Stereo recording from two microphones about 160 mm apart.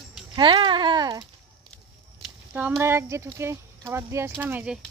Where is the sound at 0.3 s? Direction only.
30° right (ahead or behind).